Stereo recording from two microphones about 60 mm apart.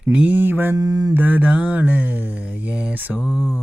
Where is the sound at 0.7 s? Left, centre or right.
Right.